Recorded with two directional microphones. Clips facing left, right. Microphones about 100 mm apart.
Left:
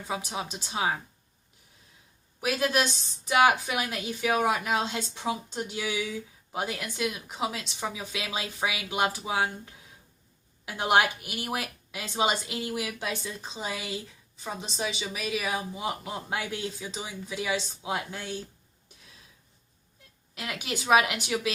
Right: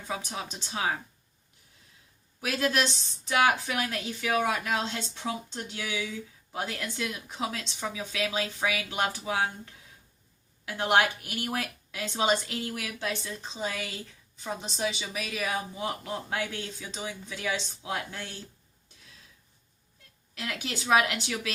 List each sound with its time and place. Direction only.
0.1 s speech: 15° left (ahead or behind)
2.4 s speech: 15° left (ahead or behind)
10.7 s speech: 15° left (ahead or behind)
20.3 s speech: 15° left (ahead or behind)